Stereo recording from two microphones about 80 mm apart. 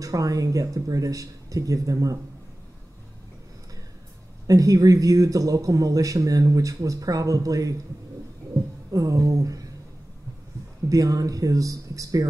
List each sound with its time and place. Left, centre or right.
0.0 s a man's voice: right
4.5 s a man's voice: right
8.9 s a sound: right
10.9 s a man's voice: right